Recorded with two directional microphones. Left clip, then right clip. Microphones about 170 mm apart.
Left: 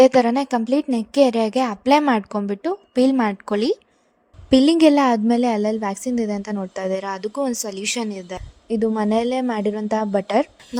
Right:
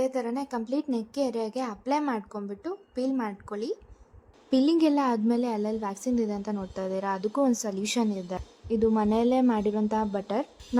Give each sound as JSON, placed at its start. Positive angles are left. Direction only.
{"t": 0.0, "sound": "a woman's voice", "side_deg": 60}